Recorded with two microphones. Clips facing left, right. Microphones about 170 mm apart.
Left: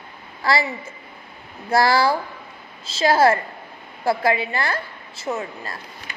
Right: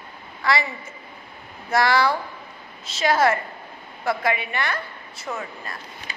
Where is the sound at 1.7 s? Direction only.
35° left (ahead or behind).